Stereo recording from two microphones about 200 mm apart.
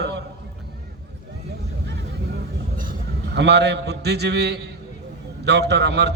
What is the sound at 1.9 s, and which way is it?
Vehicle, 60° right (ahead or behind).